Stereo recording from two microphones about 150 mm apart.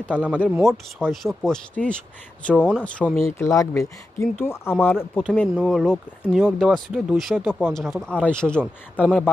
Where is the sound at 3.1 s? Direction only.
20° left (ahead or behind).